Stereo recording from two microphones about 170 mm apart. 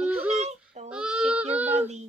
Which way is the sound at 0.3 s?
40° right (ahead or behind).